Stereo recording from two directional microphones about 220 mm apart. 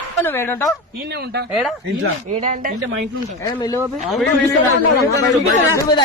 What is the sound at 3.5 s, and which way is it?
Speech, 15° left (ahead or behind).